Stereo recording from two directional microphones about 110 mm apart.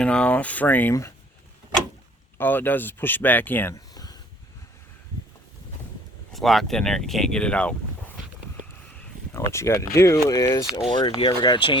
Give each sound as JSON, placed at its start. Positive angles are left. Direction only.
{"t": 0.0, "sound": "speech", "side_deg": 10}
{"t": 2.4, "sound": "speech", "side_deg": 20}
{"t": 3.8, "sound": "a sound", "side_deg": 35}
{"t": 6.3, "sound": "speech", "side_deg": 0}
{"t": 9.3, "sound": "speech", "side_deg": 25}
{"t": 10.9, "sound": "speech", "side_deg": 45}